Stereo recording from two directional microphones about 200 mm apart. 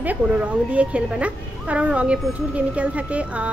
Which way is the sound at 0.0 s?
5° right (ahead or behind).